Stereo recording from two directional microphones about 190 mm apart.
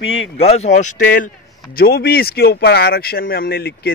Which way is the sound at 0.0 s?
90° left.